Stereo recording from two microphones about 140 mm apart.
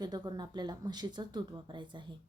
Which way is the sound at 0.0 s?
30° right (ahead or behind).